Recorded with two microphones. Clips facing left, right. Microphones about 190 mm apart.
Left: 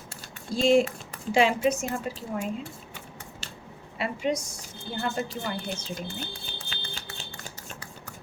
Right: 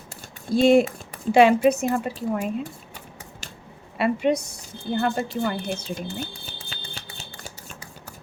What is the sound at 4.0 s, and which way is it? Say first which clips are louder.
A woman's voice: right 7 dB; 60° right (ahead or behind).